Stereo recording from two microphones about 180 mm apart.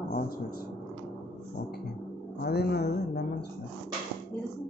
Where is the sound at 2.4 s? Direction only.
65° left (ahead or behind).